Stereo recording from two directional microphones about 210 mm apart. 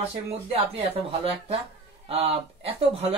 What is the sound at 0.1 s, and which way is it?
Speech, 25° right (ahead or behind).